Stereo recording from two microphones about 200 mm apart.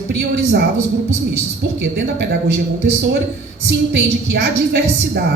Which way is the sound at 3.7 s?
55° right (ahead or behind).